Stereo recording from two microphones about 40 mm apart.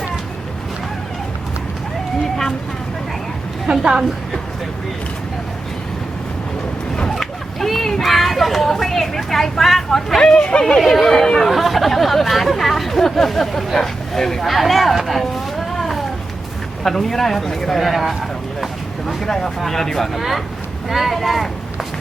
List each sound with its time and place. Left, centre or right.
3.7 s a woman's voice: centre
7.2 s speech: centre
10.2 s speech: centre
19.0 s speech: centre